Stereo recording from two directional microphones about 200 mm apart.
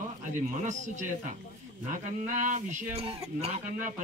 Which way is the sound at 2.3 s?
40° right (ahead or behind).